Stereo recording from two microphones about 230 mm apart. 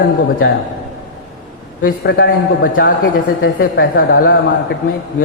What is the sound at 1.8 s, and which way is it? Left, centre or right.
A woman's voice, left.